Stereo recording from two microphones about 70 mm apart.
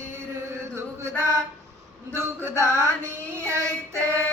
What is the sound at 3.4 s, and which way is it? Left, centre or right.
Child singing, right.